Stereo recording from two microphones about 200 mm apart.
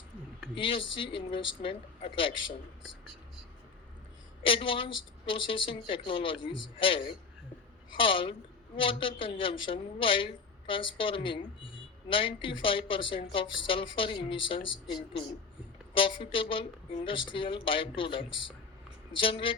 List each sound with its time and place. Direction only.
0.5 s a woman's voice: 25° left (ahead or behind)
4.4 s a woman's voice: 25° left (ahead or behind)
16.0 s a woman's voice: 25° left (ahead or behind)